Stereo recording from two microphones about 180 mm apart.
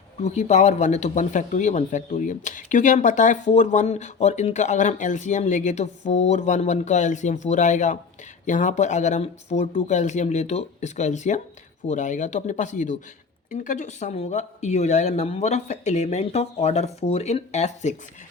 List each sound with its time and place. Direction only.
0.2 s speech: 40° left (ahead or behind)